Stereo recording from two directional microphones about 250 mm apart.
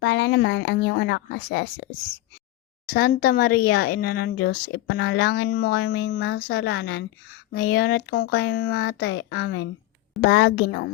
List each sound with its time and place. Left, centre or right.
0.0 s a woman's voice: left
2.9 s a woman's voice: left